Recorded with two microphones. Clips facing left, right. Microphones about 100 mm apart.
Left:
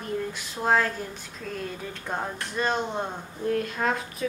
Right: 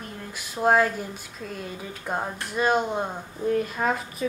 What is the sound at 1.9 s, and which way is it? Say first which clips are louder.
Speech: right 5 dB; 5° right (ahead or behind).